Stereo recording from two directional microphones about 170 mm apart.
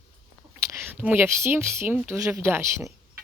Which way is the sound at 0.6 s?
15° right (ahead or behind).